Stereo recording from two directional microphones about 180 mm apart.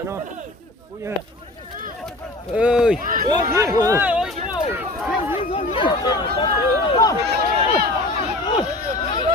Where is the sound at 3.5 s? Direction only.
15° right (ahead or behind).